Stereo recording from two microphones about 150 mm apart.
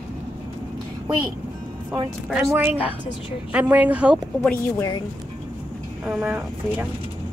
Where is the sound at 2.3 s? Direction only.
15° right (ahead or behind).